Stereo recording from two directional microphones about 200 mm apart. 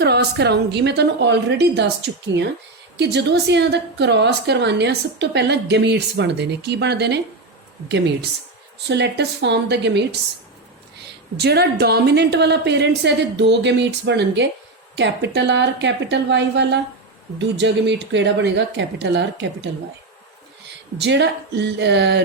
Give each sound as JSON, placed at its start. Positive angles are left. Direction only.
{"t": 0.0, "sound": "a woman's voice", "side_deg": -55}
{"t": 11.3, "sound": "a woman's voice", "side_deg": -55}
{"t": 21.0, "sound": "a woman's voice", "side_deg": -60}